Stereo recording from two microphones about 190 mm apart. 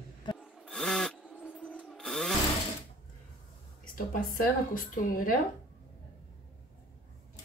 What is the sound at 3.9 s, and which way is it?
A woman's voice, 45° left (ahead or behind).